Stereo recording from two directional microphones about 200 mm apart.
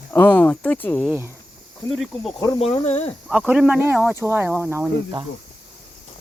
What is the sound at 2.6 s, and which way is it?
Speech, 30° left (ahead or behind).